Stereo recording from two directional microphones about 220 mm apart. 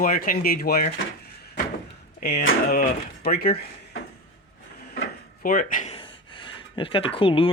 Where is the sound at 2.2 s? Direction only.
45° left (ahead or behind).